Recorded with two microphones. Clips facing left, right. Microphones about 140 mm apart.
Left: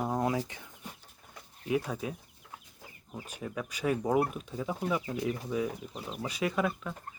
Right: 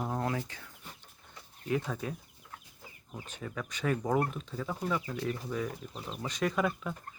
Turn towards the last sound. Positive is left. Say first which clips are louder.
# even
turn(degrees=0)  # may be behind; listen again after turning